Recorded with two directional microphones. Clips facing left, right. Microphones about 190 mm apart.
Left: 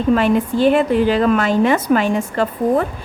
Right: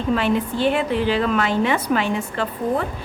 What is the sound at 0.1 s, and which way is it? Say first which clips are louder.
A woman's voice: left 5 dB; 45° left (ahead or behind).